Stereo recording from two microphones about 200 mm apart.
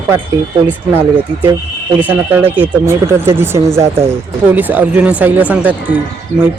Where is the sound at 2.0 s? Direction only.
10° right (ahead or behind).